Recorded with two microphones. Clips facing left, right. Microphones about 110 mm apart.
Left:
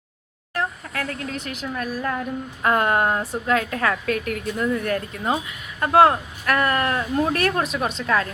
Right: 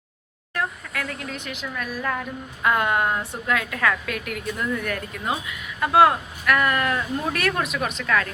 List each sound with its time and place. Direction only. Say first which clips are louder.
0.5 s a woman's voice: left 2 dB; 35° left (ahead or behind)